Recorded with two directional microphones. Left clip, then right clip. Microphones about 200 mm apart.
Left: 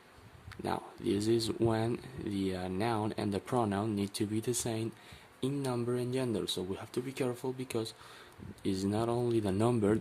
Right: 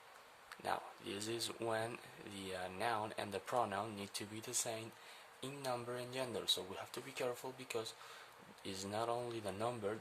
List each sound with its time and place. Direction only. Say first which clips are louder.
0.6 s speech: left 6 dB; 15° left (ahead or behind)